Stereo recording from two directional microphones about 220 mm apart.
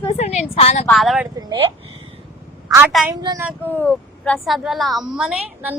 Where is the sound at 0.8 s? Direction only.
Centre (ahead or behind).